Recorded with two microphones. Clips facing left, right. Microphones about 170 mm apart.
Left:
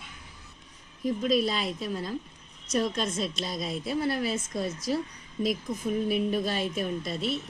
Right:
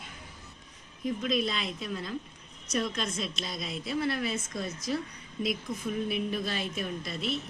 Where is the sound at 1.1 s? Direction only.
40° left (ahead or behind).